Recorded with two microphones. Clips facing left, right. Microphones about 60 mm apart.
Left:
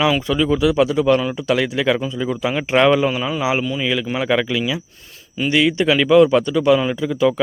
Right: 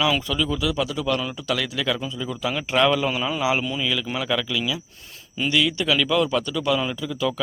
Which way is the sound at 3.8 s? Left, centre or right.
Left.